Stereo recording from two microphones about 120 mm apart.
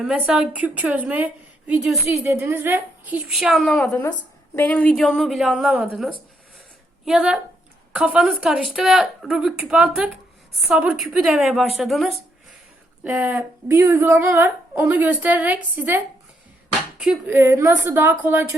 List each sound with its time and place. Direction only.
0.0 s a woman's voice: 10° right (ahead or behind)
2.2 s a woman's voice: 20° right (ahead or behind)
3.3 s speech: centre (ahead or behind)
3.8 s a woman's voice: 10° left (ahead or behind)
13.1 s a woman's voice: 10° right (ahead or behind)
17.2 s a woman's voice: 20° right (ahead or behind)